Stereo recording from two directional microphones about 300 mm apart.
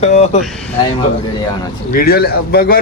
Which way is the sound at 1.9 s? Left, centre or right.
Left.